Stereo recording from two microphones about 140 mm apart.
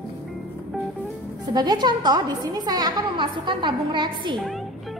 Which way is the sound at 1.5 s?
30° right (ahead or behind).